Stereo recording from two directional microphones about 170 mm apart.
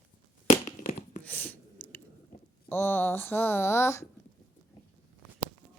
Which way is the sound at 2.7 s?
15° left (ahead or behind).